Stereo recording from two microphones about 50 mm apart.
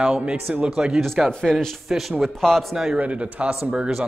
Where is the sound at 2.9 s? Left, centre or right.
Right.